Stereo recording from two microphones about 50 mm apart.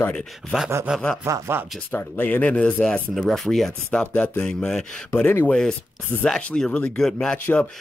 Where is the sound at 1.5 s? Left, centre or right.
Right.